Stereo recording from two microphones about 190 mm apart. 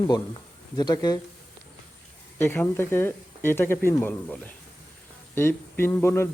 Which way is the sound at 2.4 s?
10° left (ahead or behind).